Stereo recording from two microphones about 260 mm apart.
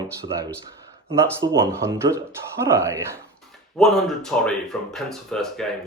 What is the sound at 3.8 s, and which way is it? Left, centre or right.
Speech, centre.